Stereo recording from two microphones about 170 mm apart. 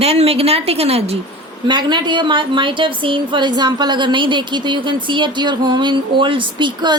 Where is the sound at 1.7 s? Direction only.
25° right (ahead or behind).